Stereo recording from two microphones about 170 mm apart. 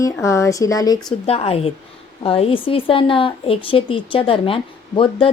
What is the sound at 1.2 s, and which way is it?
Speech, 35° left (ahead or behind).